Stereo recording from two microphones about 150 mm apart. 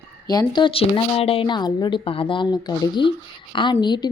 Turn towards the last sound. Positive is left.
turn(degrees=30)  # may be behind; listen again after turning